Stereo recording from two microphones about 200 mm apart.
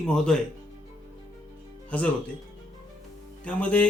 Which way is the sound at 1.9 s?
5° left (ahead or behind).